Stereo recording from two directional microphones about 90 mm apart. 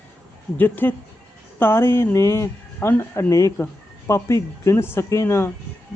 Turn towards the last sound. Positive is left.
turn(degrees=30)  # may be behind; listen again after turning